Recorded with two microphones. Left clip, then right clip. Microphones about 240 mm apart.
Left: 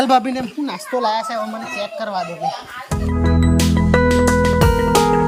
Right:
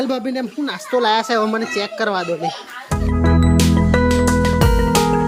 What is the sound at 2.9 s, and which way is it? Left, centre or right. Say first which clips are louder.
Music: right 2 dB; centre.